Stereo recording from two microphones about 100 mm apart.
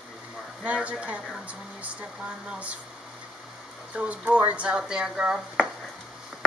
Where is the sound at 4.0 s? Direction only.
15° right (ahead or behind).